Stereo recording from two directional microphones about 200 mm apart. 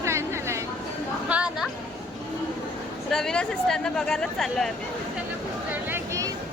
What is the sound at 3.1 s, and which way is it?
Speech, 5° left (ahead or behind).